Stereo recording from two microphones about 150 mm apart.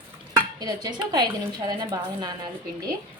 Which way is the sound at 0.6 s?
25° right (ahead or behind).